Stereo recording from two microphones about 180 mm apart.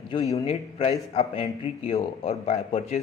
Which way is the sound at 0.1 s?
20° left (ahead or behind).